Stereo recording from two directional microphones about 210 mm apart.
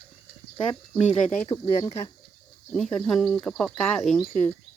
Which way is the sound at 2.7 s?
Centre (ahead or behind).